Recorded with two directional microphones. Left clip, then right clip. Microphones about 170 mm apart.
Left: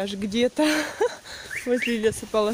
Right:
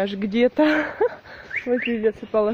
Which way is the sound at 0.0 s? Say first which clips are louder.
Right 4 dB; 10° left (ahead or behind).